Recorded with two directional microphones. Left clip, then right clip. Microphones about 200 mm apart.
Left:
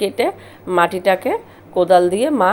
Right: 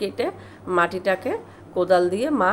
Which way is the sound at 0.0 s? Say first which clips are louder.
Left 7 dB; 15° left (ahead or behind).